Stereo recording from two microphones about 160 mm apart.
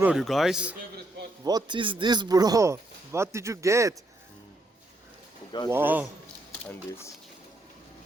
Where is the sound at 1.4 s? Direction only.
25° right (ahead or behind).